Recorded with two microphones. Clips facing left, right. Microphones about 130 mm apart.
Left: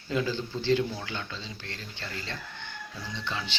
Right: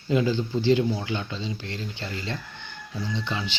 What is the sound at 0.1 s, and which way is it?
Speech, 15° right (ahead or behind).